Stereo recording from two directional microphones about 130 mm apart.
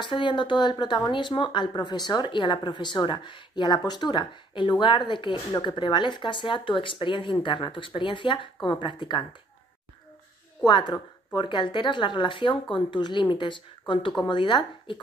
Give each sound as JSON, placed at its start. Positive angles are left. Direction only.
{"t": 0.0, "sound": "speech", "side_deg": 40}
{"t": 10.6, "sound": "speech", "side_deg": 35}